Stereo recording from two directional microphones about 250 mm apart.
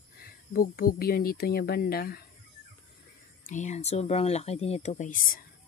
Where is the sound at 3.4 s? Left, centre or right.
Left.